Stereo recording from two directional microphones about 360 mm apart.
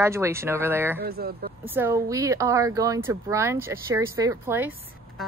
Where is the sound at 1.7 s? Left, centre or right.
Centre.